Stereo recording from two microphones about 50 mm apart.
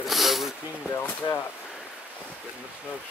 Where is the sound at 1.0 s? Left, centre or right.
Left.